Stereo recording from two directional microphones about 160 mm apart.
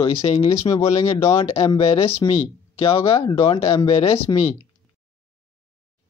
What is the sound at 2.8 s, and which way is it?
Speech, 35° left (ahead or behind).